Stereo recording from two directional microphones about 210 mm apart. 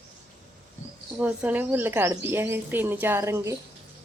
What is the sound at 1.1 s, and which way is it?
Speech, 5° right (ahead or behind).